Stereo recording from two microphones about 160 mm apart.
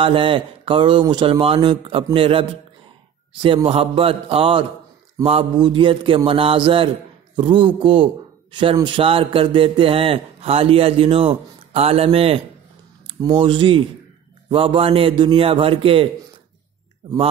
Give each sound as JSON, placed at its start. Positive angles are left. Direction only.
{"t": 0.0, "sound": "a man's voice", "side_deg": -35}
{"t": 3.4, "sound": "a man's voice", "side_deg": -35}